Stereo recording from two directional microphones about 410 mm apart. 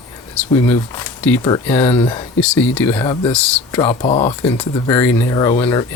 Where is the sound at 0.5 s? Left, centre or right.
Centre.